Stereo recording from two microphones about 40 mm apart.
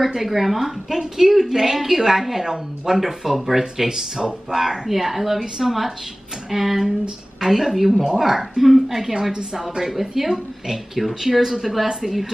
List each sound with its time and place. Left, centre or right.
0.0 s a woman's voice: centre